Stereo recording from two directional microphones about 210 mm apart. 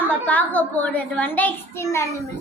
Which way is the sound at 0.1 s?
5° left (ahead or behind).